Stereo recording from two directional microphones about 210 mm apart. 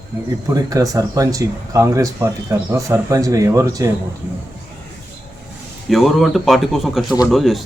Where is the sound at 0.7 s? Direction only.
15° right (ahead or behind).